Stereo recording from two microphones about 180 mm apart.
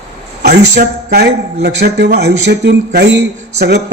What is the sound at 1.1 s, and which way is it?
Speech, 65° right (ahead or behind).